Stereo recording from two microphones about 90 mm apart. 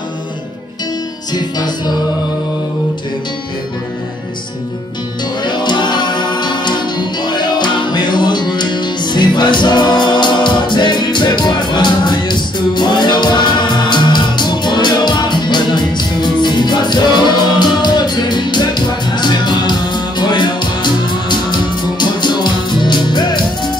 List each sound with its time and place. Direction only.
1.3 s music: 50° left (ahead or behind)
5.4 s music: 55° left (ahead or behind)